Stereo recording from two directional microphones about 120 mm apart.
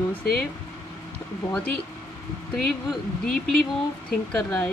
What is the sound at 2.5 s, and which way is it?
Speech, 5° left (ahead or behind).